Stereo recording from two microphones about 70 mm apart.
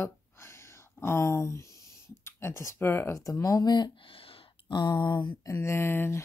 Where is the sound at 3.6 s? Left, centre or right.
Left.